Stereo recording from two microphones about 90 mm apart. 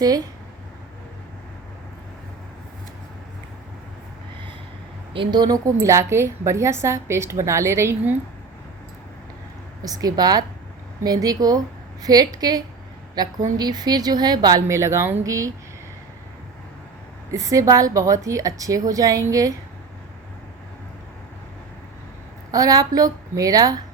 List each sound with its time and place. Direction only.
5.1 s speech: 60° right (ahead or behind)
5.6 s a woman's voice: 35° right (ahead or behind)
9.8 s speech: 45° right (ahead or behind)
14.7 s a woman's voice: 30° right (ahead or behind)
17.3 s a woman's voice: 35° right (ahead or behind)
22.5 s a woman's voice: 40° right (ahead or behind)